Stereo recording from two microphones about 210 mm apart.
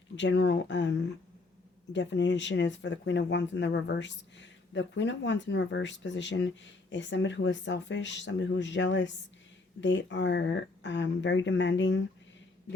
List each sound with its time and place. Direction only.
0.2 s speech: 60° left (ahead or behind)